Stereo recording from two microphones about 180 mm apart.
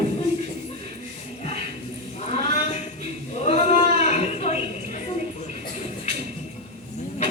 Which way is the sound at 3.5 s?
35° left (ahead or behind).